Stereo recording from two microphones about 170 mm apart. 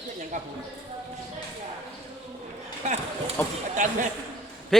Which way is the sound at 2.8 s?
40° right (ahead or behind).